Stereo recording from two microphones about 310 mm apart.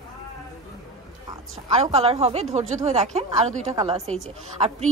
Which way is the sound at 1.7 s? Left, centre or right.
Centre.